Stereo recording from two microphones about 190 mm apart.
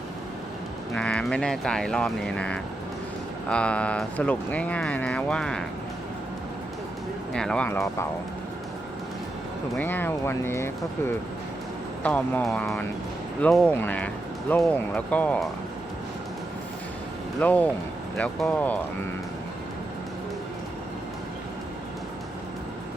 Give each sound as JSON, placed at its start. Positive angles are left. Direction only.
{"t": 0.9, "sound": "speech", "side_deg": 5}
{"t": 7.3, "sound": "speech", "side_deg": 5}
{"t": 9.7, "sound": "speech", "side_deg": 10}
{"t": 12.0, "sound": "speech", "side_deg": 10}
{"t": 17.4, "sound": "speech", "side_deg": 10}